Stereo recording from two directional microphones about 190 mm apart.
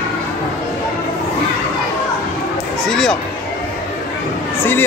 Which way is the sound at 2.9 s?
Centre (ahead or behind).